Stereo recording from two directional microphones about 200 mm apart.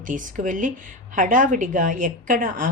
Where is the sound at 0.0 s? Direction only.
40° right (ahead or behind).